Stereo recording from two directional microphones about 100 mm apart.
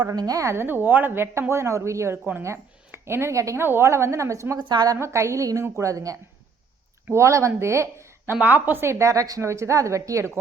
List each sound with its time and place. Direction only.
0.0 s a woman's voice: 40° right (ahead or behind)
4.9 s a woman's voice: 30° right (ahead or behind)
8.4 s a woman's voice: 15° right (ahead or behind)